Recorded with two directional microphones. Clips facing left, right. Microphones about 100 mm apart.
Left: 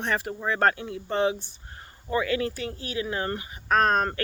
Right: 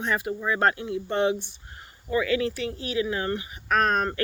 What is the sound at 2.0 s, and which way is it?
Speech, 35° left (ahead or behind).